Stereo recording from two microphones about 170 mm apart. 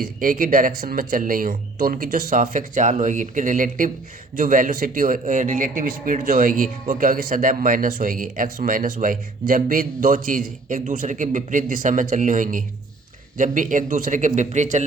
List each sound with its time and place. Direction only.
0.0 s a man's voice: 55° right (ahead or behind)